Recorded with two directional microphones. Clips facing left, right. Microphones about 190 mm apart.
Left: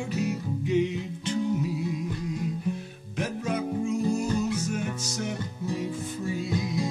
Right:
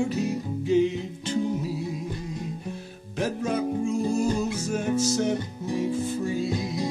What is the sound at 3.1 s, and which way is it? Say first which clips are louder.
Music: right 3 dB; 30° right (ahead or behind).